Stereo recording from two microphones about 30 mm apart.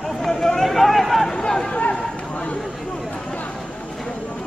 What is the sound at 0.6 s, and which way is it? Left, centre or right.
Run, centre.